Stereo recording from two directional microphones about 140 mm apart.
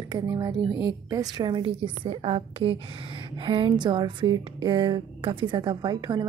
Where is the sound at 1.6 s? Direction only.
45° right (ahead or behind).